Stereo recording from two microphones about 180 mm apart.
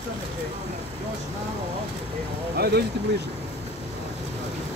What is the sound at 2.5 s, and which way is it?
Speech, 65° right (ahead or behind).